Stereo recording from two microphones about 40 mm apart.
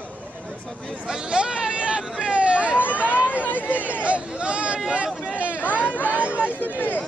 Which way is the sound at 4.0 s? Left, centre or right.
Right.